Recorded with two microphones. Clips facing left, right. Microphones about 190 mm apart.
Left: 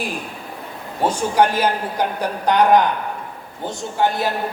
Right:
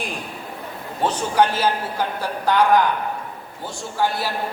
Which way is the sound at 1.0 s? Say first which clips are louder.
Left 2 dB; 10° left (ahead or behind).